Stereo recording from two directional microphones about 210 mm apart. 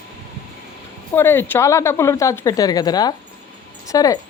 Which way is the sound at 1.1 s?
10° left (ahead or behind).